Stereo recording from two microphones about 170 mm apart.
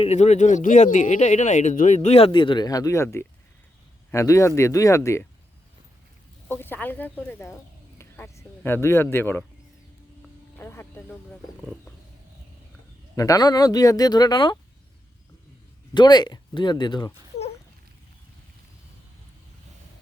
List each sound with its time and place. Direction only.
0.0 s speech: 40° left (ahead or behind); by 5.2 s 15° left (ahead or behind)
6.5 s speech: 10° left (ahead or behind)
10.6 s music: 10° left (ahead or behind)
13.1 s speech: 20° left (ahead or behind)
16.0 s speech: 25° left (ahead or behind)